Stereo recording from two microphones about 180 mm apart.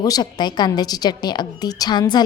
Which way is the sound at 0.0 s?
20° left (ahead or behind).